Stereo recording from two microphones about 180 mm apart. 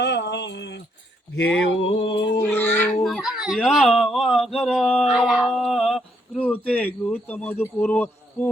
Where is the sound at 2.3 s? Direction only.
10° left (ahead or behind).